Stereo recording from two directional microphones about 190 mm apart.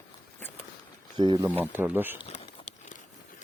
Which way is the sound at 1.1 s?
25° right (ahead or behind).